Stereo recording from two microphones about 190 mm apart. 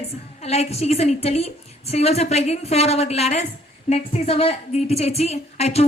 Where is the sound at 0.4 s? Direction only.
35° left (ahead or behind).